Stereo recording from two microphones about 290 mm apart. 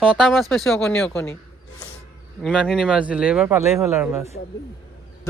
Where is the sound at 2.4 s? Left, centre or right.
Centre.